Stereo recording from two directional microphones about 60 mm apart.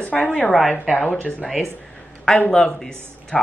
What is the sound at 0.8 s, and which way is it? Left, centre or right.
Speech, centre.